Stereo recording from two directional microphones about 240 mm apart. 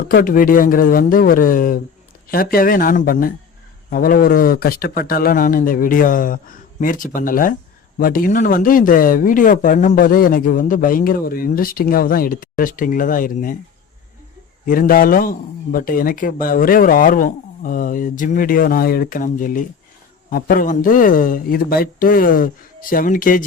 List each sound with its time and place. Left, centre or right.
0.1 s speech: left
14.6 s speech: left